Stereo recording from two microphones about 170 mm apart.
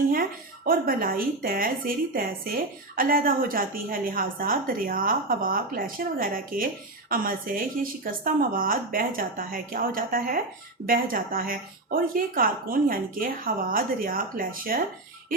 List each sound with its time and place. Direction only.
0.1 s a woman's voice: 55° right (ahead or behind)